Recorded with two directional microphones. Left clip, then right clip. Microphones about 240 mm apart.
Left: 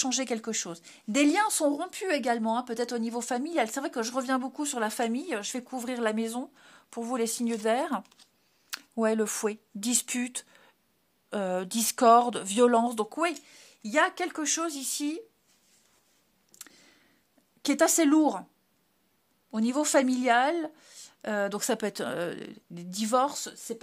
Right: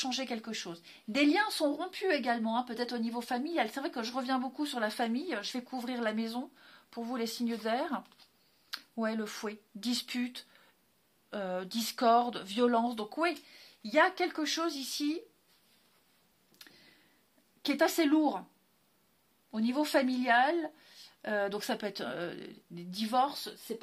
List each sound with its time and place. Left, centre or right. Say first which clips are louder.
0.0 s speech: left 6 dB; left
16.5 s a sound: left 4 dB; left
17.6 s speech: left 5 dB; left
19.5 s speech: left 5 dB; left